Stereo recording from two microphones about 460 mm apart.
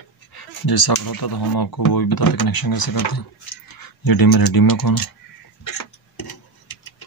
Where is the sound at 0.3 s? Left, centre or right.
Left.